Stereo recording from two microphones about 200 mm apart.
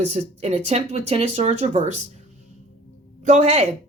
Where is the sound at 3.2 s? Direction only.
35° right (ahead or behind).